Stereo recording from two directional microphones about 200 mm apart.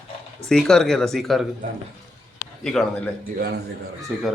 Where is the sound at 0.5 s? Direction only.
Centre (ahead or behind).